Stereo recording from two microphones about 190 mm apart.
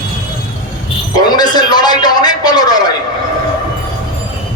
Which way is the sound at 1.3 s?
20° left (ahead or behind).